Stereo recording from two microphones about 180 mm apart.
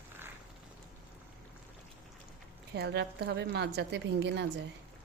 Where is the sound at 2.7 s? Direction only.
70° right (ahead or behind).